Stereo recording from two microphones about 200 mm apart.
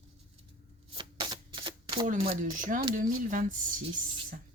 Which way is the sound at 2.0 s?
35° right (ahead or behind).